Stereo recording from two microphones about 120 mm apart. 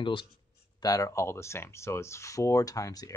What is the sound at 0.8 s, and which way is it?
Speech, 30° left (ahead or behind).